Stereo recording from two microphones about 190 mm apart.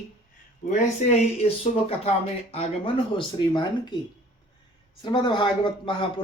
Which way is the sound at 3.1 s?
25° left (ahead or behind).